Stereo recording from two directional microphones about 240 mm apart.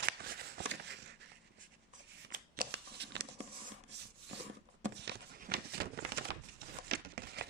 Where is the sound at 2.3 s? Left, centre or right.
Right.